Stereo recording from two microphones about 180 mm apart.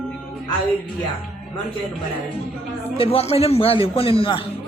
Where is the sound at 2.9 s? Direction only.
30° left (ahead or behind).